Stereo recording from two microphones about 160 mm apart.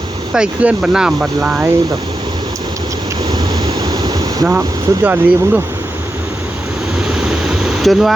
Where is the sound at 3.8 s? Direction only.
25° right (ahead or behind).